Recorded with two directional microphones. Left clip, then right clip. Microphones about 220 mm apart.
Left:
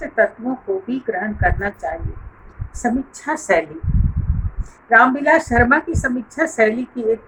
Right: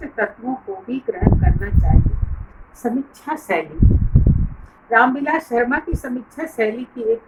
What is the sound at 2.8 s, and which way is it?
Speech, 25° left (ahead or behind).